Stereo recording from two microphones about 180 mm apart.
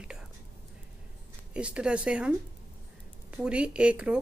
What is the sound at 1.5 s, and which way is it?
Speech, 5° right (ahead or behind).